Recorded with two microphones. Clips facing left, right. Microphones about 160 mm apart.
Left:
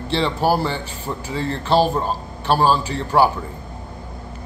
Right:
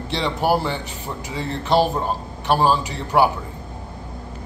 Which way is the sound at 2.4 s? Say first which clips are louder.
Left 1 dB; 15° right (ahead or behind).